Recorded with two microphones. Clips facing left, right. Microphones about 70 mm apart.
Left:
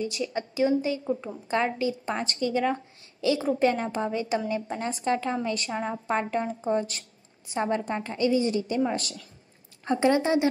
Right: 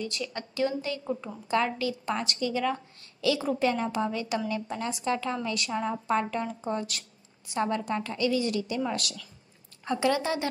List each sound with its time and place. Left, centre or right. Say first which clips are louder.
0.0 s a woman's voice: left 5 dB; centre